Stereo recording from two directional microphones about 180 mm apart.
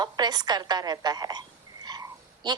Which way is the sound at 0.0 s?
20° right (ahead or behind).